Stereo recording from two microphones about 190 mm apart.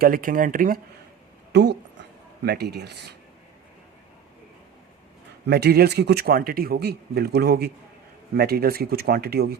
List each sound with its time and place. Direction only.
0.0 s speech: 45° right (ahead or behind)
1.5 s a man's voice: 65° right (ahead or behind)
5.5 s a man's voice: 60° right (ahead or behind)